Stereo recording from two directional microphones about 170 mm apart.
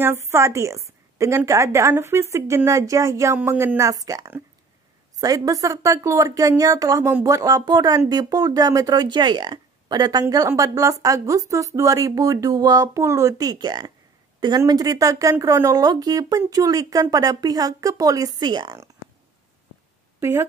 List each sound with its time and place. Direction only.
0.0 s a woman's voice: 15° right (ahead or behind)
20.2 s speech: 15° right (ahead or behind)